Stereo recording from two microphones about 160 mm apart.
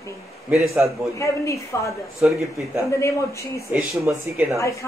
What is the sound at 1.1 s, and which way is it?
Speech, 20° left (ahead or behind).